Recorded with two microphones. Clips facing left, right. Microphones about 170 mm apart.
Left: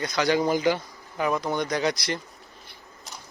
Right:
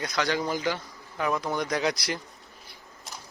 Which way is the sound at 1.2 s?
Centre (ahead or behind).